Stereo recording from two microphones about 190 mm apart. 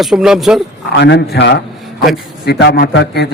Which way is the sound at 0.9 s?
65° left (ahead or behind).